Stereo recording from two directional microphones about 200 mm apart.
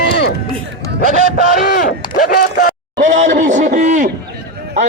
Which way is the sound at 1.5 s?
50° left (ahead or behind).